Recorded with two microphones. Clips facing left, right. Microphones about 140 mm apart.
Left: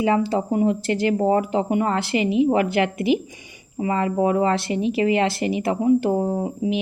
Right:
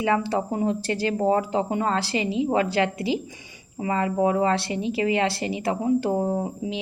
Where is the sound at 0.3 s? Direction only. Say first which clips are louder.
Left 4 dB; 20° left (ahead or behind).